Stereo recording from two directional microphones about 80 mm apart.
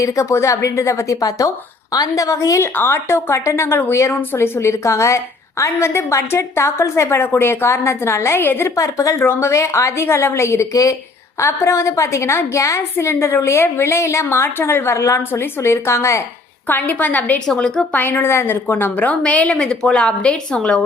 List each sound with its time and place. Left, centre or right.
0.0 s speech: left
2.7 s a woman's voice: left
8.7 s speech: left
9.2 s a woman's voice: left
16.6 s a woman's voice: left
17.4 s a woman's voice: centre
17.9 s a woman's voice: left